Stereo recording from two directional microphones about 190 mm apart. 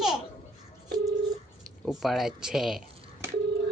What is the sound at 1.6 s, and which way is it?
Speech, centre (ahead or behind).